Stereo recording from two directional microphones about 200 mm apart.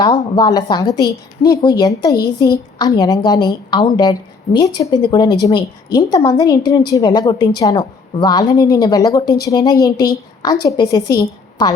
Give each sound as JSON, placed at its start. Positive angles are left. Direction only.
{"t": 0.0, "sound": "a woman's voice", "side_deg": 20}